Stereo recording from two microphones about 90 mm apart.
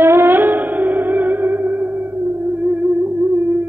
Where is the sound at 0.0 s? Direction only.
25° right (ahead or behind).